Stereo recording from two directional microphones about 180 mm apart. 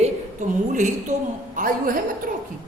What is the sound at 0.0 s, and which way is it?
A woman's voice, 45° right (ahead or behind).